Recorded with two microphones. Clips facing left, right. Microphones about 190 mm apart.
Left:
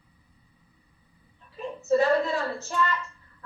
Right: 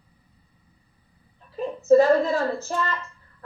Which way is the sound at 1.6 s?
35° right (ahead or behind).